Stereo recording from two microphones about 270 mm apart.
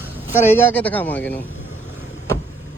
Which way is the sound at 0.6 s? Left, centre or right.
Centre.